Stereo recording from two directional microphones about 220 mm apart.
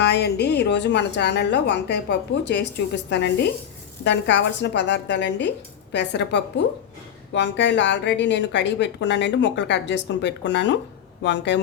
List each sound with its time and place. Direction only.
0.0 s speech: 50° left (ahead or behind)